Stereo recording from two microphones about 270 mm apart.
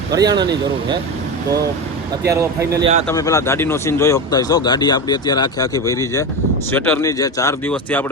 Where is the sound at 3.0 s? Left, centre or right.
Centre.